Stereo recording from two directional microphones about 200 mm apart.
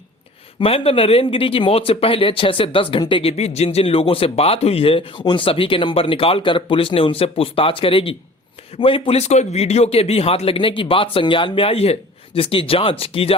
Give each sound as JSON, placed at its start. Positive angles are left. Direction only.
{"t": 0.6, "sound": "speech", "side_deg": 30}